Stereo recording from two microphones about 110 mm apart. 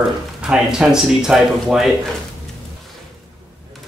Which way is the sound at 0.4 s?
5° right (ahead or behind).